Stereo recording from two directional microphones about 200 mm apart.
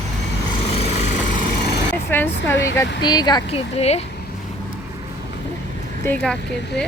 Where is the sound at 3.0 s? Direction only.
20° left (ahead or behind).